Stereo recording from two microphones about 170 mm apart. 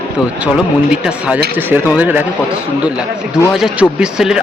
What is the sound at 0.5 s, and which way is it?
Speech, 5° right (ahead or behind).